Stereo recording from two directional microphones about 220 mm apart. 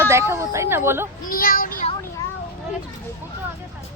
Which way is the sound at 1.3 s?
40° left (ahead or behind).